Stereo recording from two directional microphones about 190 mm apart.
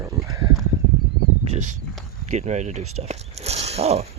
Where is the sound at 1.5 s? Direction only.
40° right (ahead or behind).